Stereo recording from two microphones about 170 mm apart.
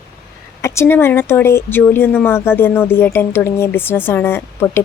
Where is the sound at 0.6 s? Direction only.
15° left (ahead or behind).